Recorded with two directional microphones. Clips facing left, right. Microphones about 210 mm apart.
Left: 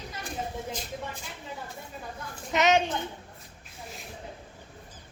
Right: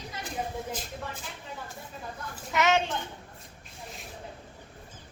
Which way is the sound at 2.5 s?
20° left (ahead or behind).